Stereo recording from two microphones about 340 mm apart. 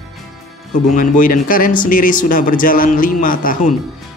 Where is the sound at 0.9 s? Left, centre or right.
Left.